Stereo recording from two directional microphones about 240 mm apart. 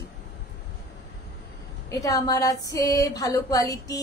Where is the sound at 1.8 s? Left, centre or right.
Centre.